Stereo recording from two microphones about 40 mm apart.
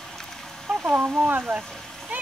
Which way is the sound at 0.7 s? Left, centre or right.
Right.